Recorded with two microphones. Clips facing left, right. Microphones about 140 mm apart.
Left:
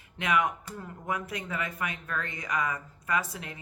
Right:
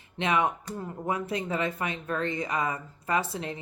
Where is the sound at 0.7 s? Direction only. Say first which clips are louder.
Right 4 dB; 30° right (ahead or behind).